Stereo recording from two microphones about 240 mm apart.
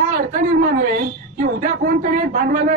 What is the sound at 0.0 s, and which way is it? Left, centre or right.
A woman's voice, right.